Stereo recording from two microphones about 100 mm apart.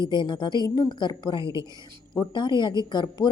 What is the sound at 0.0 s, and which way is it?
A woman's voice, 50° left (ahead or behind).